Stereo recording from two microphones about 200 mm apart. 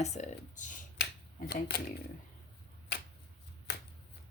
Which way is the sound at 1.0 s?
50° left (ahead or behind).